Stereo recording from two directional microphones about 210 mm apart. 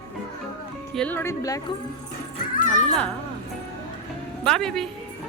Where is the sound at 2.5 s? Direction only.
40° left (ahead or behind).